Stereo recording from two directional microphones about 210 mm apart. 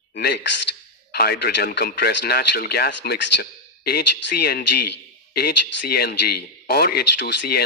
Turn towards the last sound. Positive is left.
turn(degrees=50)  # may be behind; listen again after turning